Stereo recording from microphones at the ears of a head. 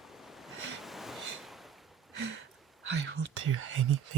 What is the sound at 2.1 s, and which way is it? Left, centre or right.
Speech, right.